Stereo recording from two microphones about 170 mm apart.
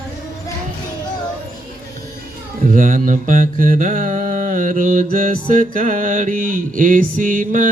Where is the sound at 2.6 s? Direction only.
50° right (ahead or behind).